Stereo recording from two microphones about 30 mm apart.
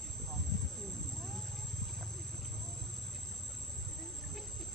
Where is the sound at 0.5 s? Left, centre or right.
Centre.